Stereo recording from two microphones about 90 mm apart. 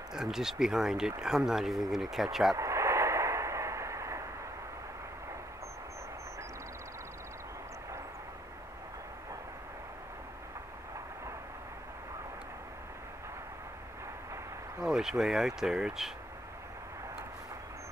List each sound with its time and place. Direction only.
0.1 s speech: 5° right (ahead or behind)
2.5 s radio: 35° right (ahead or behind)
14.9 s speech: 5° right (ahead or behind)